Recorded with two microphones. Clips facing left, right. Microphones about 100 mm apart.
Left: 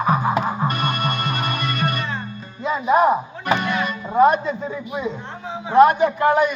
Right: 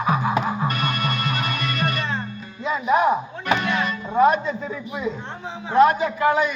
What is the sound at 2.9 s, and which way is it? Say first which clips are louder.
Chopping: left 3 dB; 5° left (ahead or behind).